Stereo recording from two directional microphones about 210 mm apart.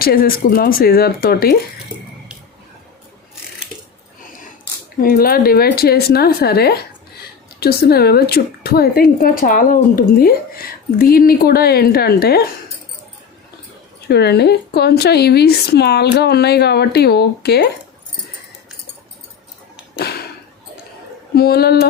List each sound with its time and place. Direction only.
0.0 s a woman's voice: 45° left (ahead or behind)
4.9 s a woman's voice: 45° left (ahead or behind)
14.1 s a woman's voice: 50° left (ahead or behind)
21.3 s a woman's voice: 50° left (ahead or behind)